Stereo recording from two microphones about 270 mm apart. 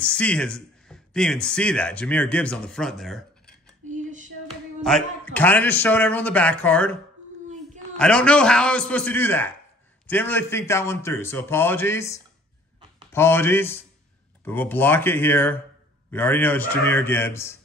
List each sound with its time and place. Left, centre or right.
0.0 s a man's voice: centre
3.9 s a sound: right
4.5 s a man's voice: centre
8.0 s a man's voice: centre